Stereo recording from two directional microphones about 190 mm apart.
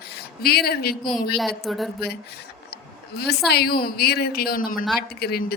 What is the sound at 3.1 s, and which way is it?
A woman's voice, 55° left (ahead or behind).